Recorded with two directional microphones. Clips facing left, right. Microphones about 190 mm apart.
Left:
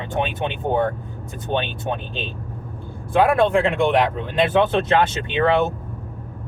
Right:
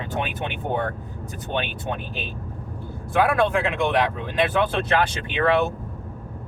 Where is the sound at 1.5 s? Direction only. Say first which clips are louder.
Left 4 dB; 25° left (ahead or behind).